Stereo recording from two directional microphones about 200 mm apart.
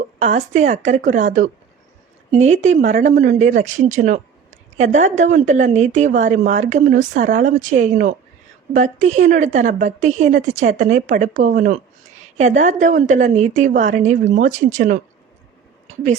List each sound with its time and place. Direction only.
0.2 s speech: 35° right (ahead or behind)